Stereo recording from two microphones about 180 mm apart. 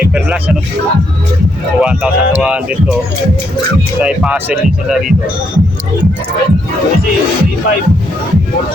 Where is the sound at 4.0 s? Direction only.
5° right (ahead or behind).